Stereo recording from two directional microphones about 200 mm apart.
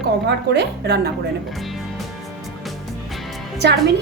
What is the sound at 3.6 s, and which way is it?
Speech, 55° right (ahead or behind).